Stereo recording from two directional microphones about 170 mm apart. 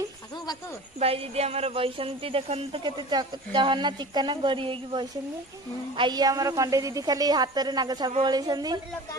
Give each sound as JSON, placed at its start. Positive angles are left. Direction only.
{"t": 0.9, "sound": "a woman's voice", "side_deg": -35}